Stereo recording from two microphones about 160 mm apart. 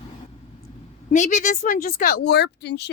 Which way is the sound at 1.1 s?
55° left (ahead or behind).